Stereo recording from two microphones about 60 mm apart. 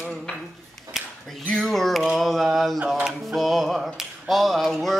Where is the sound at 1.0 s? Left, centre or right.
Centre.